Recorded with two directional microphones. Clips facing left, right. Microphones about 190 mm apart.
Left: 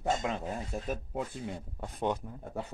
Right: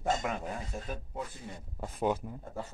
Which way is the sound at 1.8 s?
5° right (ahead or behind).